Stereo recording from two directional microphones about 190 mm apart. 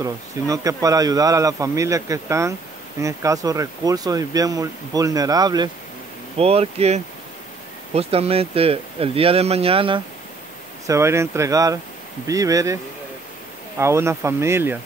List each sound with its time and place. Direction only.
0.0 s speech: 15° right (ahead or behind)
6.3 s speech: 30° right (ahead or behind)
10.9 s speech: 15° right (ahead or behind)
13.7 s speech: 15° right (ahead or behind)